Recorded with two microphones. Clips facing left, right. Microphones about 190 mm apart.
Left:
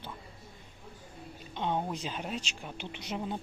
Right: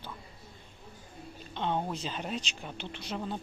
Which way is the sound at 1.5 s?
10° left (ahead or behind).